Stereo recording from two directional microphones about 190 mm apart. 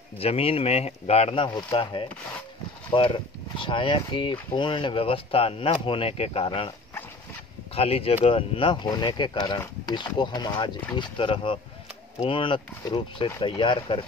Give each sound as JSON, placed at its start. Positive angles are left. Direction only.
{"t": 0.2, "sound": "speech", "side_deg": 30}
{"t": 7.7, "sound": "speech", "side_deg": 30}